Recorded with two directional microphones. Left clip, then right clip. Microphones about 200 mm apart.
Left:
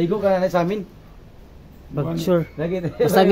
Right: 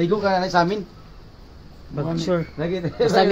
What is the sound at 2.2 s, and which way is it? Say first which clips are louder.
Speech: left 4 dB; 50° left (ahead or behind).